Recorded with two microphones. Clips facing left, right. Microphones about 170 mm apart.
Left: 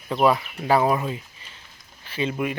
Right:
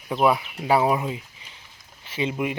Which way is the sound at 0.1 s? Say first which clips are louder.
Left 1 dB; 10° right (ahead or behind).